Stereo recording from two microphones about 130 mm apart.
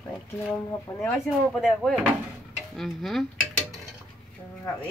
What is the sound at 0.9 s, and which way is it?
Speech, 15° left (ahead or behind).